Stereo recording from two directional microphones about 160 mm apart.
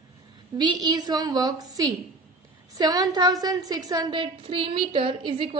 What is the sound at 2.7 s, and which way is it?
A woman's voice, 25° right (ahead or behind).